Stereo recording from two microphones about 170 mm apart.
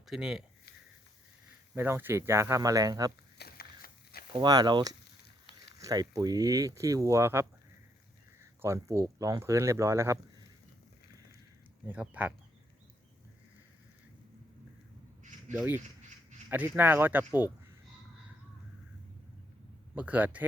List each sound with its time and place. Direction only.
0.1 s speech: 5° right (ahead or behind)
1.7 s speech: 10° right (ahead or behind)
3.3 s a sound: 65° left (ahead or behind)
4.3 s speech: 25° right (ahead or behind)
8.6 s speech: 15° right (ahead or behind)
11.9 s speech: 10° right (ahead or behind)
15.5 s speech: 10° right (ahead or behind)
20.0 s speech: 10° right (ahead or behind)